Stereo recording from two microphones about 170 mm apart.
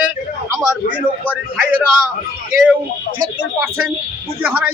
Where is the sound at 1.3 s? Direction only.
10° right (ahead or behind).